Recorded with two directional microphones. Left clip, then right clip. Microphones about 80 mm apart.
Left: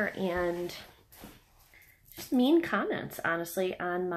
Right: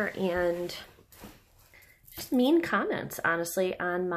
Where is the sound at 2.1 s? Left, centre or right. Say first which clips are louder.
Right 1 dB; right.